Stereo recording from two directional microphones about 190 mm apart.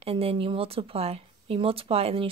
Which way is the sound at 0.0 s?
30° right (ahead or behind).